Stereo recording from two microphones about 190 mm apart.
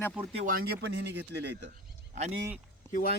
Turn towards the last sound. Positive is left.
turn(degrees=45)  # may be behind; listen again after turning